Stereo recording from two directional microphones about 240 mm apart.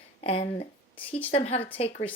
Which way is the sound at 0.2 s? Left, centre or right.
Left.